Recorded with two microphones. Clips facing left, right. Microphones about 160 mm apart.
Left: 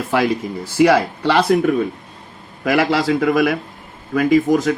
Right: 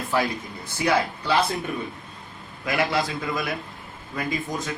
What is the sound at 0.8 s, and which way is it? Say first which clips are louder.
Speech: left 9 dB; 75° left (ahead or behind).